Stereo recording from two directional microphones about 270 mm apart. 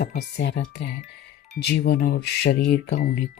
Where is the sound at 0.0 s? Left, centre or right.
Left.